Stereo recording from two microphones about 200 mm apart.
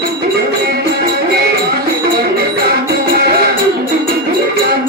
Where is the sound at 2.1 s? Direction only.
50° right (ahead or behind).